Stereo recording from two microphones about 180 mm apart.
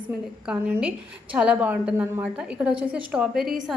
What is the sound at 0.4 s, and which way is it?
A woman's voice, 10° right (ahead or behind).